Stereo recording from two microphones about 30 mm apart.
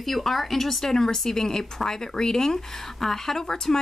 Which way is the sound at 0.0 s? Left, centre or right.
Centre.